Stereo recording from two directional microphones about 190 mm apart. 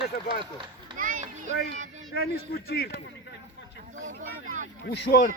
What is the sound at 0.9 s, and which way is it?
Speech, 45° right (ahead or behind).